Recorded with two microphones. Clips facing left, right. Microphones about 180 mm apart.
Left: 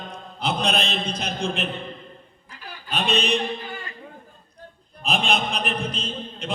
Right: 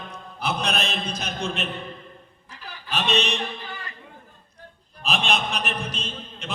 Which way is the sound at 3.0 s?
55° left (ahead or behind).